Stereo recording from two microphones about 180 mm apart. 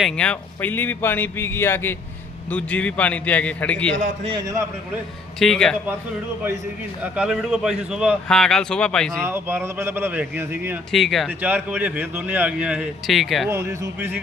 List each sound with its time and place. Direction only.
0.0 s speech: 5° left (ahead or behind)
3.9 s a man's voice: 45° right (ahead or behind)
4.3 s a man's voice: 20° right (ahead or behind)
5.4 s a man's voice: 5° left (ahead or behind)
7.0 s a man's voice: 5° right (ahead or behind)
9.2 s a man's voice: 10° right (ahead or behind)
10.9 s a man's voice: centre (ahead or behind)
11.3 s a man's voice: 10° right (ahead or behind)
13.5 s a man's voice: 15° right (ahead or behind)